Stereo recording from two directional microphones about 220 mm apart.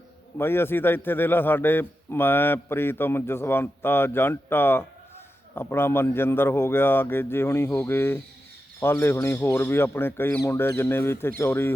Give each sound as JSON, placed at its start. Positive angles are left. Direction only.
{"t": 0.3, "sound": "a man's voice", "side_deg": 10}